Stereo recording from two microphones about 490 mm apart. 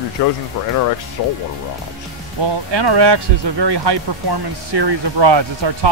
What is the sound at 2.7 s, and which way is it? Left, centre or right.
Speech, right.